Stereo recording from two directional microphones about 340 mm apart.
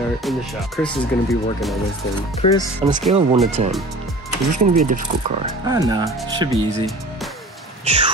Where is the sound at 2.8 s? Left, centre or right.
Centre.